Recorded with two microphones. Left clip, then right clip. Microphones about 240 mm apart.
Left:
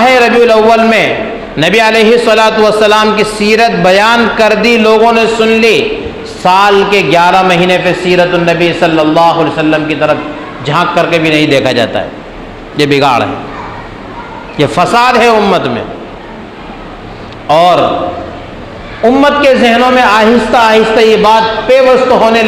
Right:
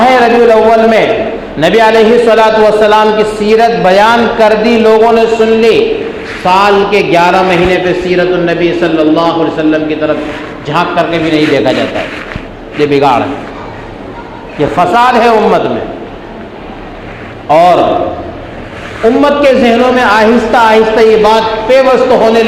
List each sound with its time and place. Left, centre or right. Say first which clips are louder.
0.0 s a sound: even; left
1.5 s a man's voice: right 1 dB; left
14.6 s a man's voice: even; left
17.5 s a man's voice: right 1 dB; left
19.2 s a man's voice: even; left